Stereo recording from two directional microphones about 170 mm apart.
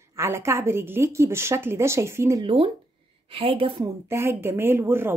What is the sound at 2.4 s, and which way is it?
A woman's voice, 30° right (ahead or behind).